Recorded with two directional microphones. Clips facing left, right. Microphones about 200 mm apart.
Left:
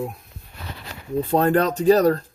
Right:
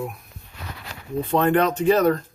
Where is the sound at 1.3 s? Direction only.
35° left (ahead or behind).